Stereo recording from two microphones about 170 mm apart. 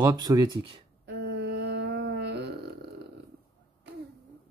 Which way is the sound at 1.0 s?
85° right.